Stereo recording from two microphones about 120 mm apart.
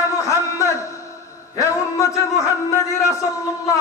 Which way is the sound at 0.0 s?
25° left (ahead or behind).